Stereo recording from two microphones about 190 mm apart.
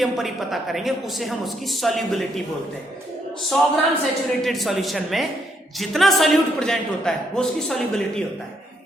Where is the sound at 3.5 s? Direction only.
5° left (ahead or behind).